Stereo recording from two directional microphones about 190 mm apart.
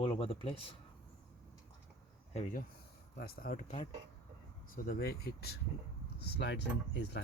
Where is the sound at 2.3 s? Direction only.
35° left (ahead or behind).